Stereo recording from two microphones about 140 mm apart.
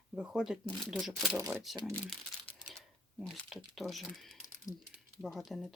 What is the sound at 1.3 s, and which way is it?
Speech, 15° right (ahead or behind).